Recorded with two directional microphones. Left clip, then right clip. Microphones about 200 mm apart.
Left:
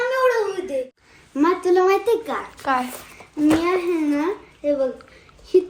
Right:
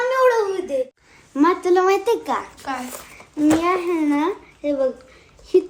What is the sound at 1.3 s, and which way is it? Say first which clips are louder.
A child's voice: right 1 dB; 15° right (ahead or behind).